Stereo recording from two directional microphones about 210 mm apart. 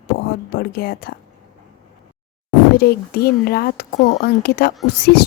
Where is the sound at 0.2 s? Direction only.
45° left (ahead or behind).